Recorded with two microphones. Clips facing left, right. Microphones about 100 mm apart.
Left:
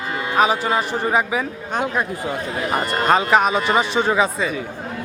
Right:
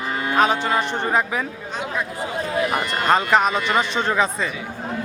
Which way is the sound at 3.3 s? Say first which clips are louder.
Left 2 dB; 5° left (ahead or behind).